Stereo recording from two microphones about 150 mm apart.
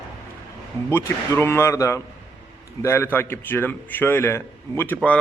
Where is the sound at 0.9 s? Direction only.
15° left (ahead or behind).